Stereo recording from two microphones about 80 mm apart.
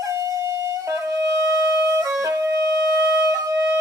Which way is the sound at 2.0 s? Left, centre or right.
Right.